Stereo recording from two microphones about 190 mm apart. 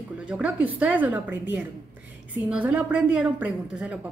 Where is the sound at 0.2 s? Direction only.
5° right (ahead or behind).